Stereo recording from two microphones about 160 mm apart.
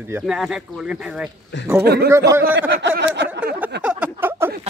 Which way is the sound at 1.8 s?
90° right.